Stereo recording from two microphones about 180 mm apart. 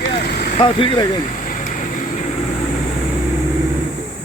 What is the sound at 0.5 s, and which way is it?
Speech, 30° left (ahead or behind).